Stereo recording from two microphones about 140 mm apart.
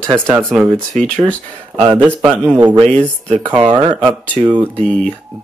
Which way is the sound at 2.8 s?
45° right (ahead or behind).